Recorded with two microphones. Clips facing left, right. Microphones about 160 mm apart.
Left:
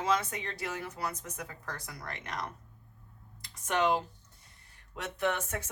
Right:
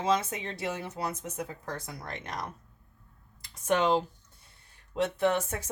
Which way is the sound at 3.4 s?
25° right (ahead or behind).